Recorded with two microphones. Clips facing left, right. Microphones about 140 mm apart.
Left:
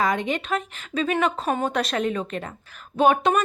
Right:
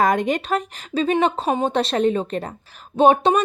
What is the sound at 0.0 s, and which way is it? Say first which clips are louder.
A woman's voice: right 5 dB; 45° right (ahead or behind).